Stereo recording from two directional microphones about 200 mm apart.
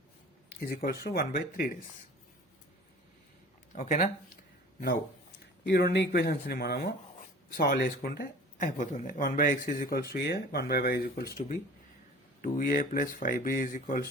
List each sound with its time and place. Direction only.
0.6 s speech: 50° left (ahead or behind)
3.7 s speech: 35° left (ahead or behind)
5.6 s speech: 60° left (ahead or behind); by 14.0 s 40° left (ahead or behind)